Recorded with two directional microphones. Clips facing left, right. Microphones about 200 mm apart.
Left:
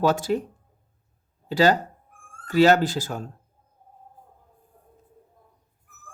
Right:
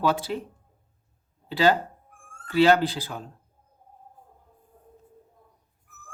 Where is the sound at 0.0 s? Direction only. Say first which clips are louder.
Left 4 dB; 45° left (ahead or behind).